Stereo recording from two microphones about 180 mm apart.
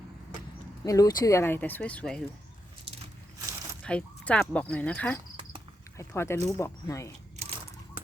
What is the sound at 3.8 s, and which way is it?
Speech, 5° left (ahead or behind).